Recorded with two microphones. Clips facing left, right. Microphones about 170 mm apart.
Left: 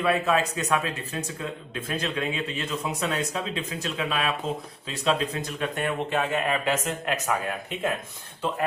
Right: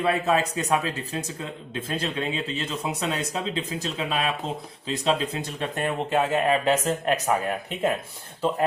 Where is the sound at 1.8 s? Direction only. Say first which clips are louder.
Even; 30° right (ahead or behind).